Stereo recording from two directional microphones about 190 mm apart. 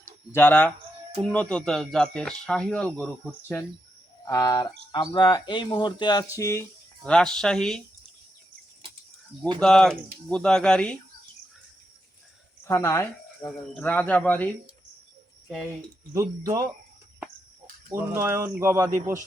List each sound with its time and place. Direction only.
0.3 s speech: 10° left (ahead or behind)
4.3 s speech: 20° left (ahead or behind); by 7.8 s 5° left (ahead or behind)
9.6 s speech: 5° left (ahead or behind)
12.6 s speech: 15° left (ahead or behind)
13.4 s speech: 5° left (ahead or behind)
16.1 s speech: 20° right (ahead or behind)
17.9 s speech: 10° right (ahead or behind)